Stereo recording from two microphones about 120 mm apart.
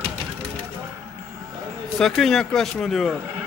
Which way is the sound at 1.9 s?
5° left (ahead or behind).